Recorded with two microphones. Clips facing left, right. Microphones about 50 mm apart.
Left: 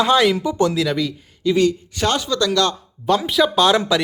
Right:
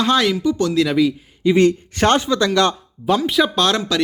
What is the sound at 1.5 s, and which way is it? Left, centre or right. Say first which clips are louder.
Speech: right 3 dB; right.